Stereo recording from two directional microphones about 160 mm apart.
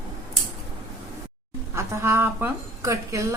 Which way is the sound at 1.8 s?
15° right (ahead or behind).